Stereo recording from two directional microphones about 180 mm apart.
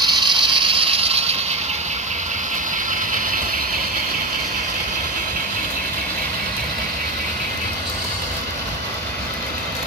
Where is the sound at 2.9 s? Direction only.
50° right (ahead or behind).